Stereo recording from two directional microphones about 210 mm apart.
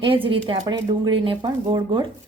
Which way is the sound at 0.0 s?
25° right (ahead or behind).